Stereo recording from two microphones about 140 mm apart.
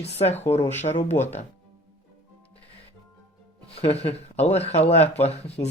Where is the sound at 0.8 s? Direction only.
55° left (ahead or behind).